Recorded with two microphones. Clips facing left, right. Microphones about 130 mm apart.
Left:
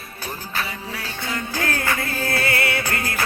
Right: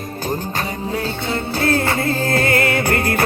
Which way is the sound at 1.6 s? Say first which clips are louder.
Right 7 dB; 35° right (ahead or behind).